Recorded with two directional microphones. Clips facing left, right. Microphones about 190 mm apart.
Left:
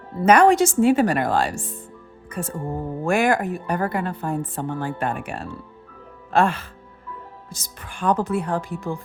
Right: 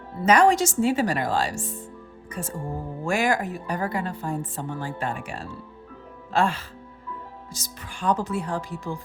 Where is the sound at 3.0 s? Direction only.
55° left (ahead or behind).